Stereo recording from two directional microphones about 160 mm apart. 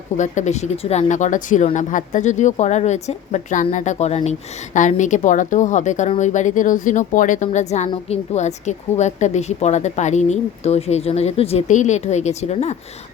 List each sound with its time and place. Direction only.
0.2 s speech: 45° left (ahead or behind)